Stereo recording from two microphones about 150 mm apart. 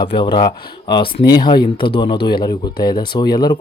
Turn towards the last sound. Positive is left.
turn(degrees=30)  # may be behind; listen again after turning